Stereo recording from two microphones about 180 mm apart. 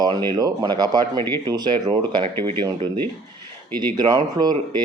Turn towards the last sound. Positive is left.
turn(degrees=-25)  # may be behind; listen again after turning